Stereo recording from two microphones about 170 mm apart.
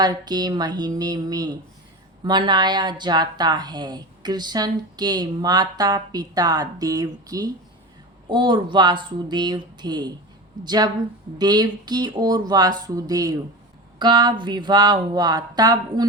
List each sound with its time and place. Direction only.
0.0 s speech: 25° right (ahead or behind)